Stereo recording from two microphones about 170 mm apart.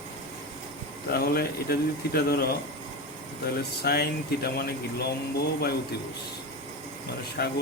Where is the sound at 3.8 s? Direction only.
65° left (ahead or behind).